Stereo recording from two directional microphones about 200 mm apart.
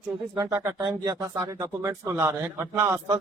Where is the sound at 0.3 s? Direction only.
15° right (ahead or behind).